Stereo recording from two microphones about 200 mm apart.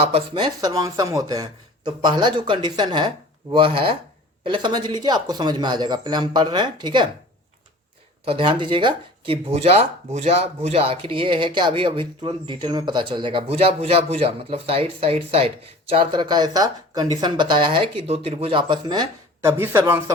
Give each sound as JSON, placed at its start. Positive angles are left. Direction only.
{"t": 0.0, "sound": "speech", "side_deg": -25}
{"t": 8.2, "sound": "speech", "side_deg": -25}